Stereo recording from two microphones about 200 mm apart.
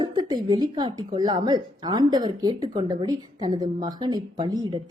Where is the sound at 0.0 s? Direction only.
20° right (ahead or behind).